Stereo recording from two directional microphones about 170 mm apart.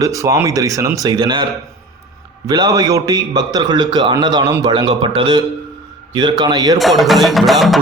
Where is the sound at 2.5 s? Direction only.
25° right (ahead or behind).